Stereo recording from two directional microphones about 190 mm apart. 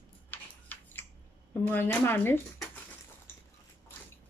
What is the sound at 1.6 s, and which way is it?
Speech, 10° left (ahead or behind).